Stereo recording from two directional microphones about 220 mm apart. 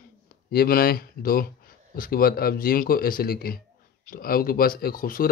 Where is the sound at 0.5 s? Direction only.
45° left (ahead or behind).